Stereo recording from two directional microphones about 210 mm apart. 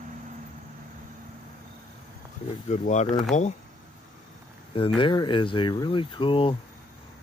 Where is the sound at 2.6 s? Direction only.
35° left (ahead or behind).